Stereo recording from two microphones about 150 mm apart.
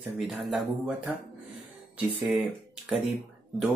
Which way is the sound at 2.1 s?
10° right (ahead or behind).